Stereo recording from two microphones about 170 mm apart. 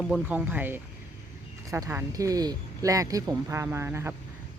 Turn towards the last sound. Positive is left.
turn(degrees=-15)  # may be behind; listen again after turning